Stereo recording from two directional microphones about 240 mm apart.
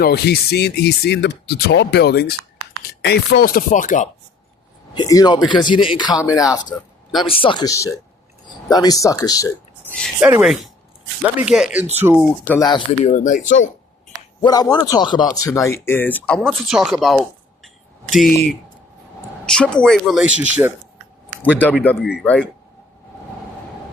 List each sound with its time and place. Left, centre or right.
0.0 s speech: left
4.9 s speech: centre
10.2 s speech: centre
12.5 s speech: centre
13.1 s speech: left
14.4 s speech: centre
19.5 s speech: centre
21.6 s speech: centre